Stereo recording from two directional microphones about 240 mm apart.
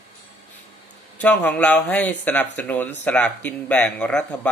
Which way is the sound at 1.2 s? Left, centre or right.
Centre.